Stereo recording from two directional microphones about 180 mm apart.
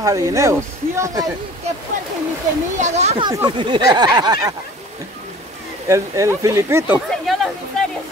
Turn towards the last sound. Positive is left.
turn(degrees=0)  # may be behind; listen again after turning